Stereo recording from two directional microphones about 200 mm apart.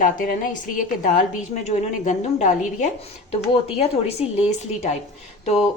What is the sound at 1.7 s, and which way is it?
A woman's voice, 40° left (ahead or behind).